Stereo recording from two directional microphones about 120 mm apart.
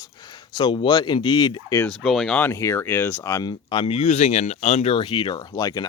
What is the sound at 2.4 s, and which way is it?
Speech, 25° left (ahead or behind).